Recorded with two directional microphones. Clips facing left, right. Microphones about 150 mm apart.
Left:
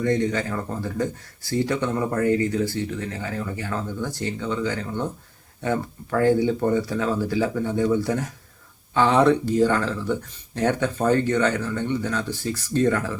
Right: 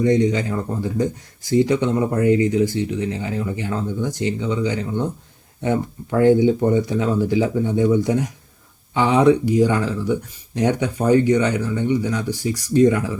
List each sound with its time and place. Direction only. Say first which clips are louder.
0.0 s speech: right 5 dB; 20° right (ahead or behind)